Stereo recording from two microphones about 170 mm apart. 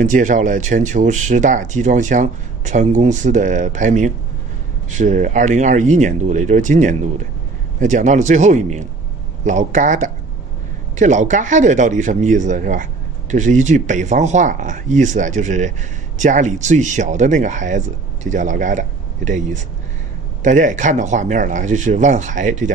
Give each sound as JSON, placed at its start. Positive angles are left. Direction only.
{"t": 0.0, "sound": "speech", "side_deg": -50}